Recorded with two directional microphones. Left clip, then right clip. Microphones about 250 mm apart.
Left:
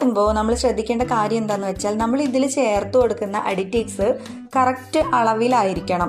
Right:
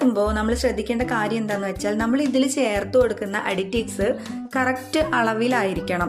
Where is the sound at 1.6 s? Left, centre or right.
Centre.